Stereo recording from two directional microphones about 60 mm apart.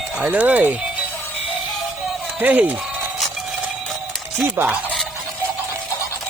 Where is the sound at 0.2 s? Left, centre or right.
Right.